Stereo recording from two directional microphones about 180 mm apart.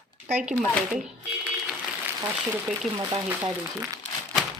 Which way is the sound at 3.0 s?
20° right (ahead or behind).